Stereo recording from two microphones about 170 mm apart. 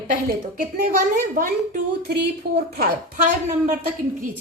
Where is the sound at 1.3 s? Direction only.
50° right (ahead or behind).